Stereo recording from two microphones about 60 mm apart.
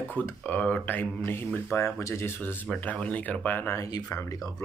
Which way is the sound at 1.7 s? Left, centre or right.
Left.